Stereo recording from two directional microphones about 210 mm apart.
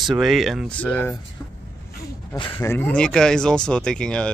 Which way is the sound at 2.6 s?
10° left (ahead or behind).